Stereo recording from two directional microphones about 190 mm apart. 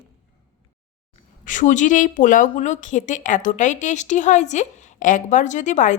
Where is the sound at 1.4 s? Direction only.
40° left (ahead or behind).